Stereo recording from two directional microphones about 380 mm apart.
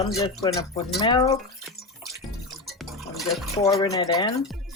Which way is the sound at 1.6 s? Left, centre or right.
Centre.